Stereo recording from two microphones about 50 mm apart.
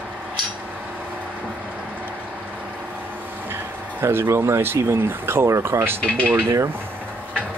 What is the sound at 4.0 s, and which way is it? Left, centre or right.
Speech, right.